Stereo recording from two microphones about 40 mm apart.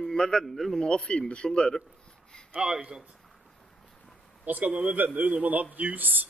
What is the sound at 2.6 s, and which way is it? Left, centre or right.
Speech, right.